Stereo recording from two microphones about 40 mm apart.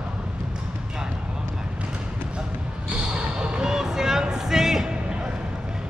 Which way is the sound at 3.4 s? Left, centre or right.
Centre.